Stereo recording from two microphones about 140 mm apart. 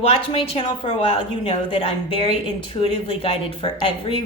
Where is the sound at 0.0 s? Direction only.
45° left (ahead or behind).